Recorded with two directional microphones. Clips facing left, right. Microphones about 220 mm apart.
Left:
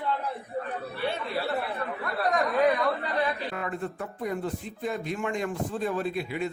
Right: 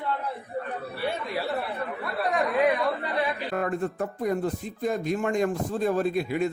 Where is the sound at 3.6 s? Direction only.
45° right (ahead or behind).